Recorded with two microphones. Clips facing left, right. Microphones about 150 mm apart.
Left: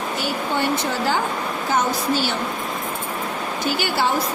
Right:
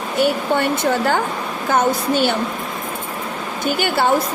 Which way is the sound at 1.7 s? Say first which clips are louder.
Right 4 dB; 60° right (ahead or behind).